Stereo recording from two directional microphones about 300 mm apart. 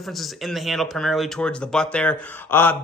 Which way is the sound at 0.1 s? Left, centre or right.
Centre.